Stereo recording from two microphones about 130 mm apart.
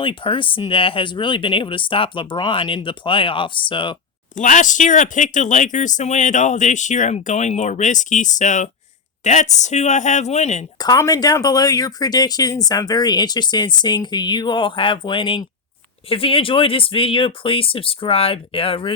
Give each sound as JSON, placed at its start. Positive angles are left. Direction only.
{"t": 0.0, "sound": "speech", "side_deg": 40}
{"t": 4.4, "sound": "speech", "side_deg": 80}
{"t": 10.8, "sound": "speech", "side_deg": 30}